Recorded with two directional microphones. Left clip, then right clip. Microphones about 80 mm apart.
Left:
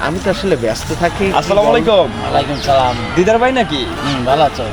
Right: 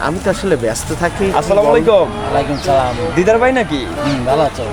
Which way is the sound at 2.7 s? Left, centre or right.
Centre.